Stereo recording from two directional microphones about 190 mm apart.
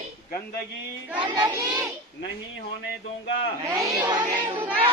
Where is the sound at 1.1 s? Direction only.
25° right (ahead or behind).